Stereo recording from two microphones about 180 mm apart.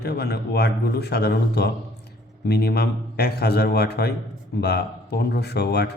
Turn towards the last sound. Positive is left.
turn(degrees=65)  # may be behind; listen again after turning